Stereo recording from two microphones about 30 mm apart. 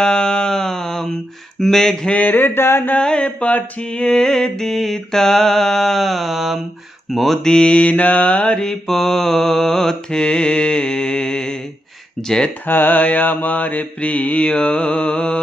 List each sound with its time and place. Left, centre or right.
0.0 s a sound: left
1.6 s mantra: centre
2.2 s a sound: left
3.0 s mantra: left
3.8 s mantra: left; by 7.3 s centre
7.6 s mantra: left
8.5 s mantra: centre
10.1 s mantra: left
12.2 s mantra: centre
12.8 s mantra: left
14.4 s mantra: left